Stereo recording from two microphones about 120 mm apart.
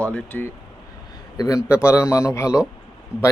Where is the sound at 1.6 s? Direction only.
20° left (ahead or behind).